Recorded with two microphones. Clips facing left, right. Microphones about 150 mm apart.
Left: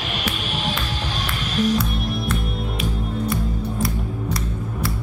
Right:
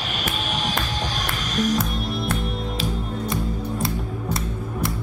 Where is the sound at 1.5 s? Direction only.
45° right (ahead or behind).